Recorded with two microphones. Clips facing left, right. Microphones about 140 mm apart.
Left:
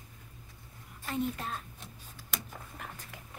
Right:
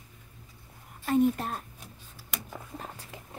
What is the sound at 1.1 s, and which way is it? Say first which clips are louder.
Speech: right 9 dB; 45° right (ahead or behind).